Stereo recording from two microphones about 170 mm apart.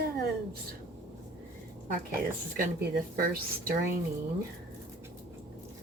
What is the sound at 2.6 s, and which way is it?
Speech, 55° right (ahead or behind).